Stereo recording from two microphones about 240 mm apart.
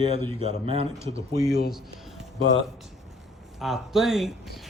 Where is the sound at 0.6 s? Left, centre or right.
Right.